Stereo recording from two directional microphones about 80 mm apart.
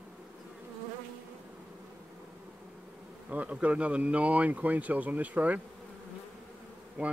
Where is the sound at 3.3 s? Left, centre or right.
Centre.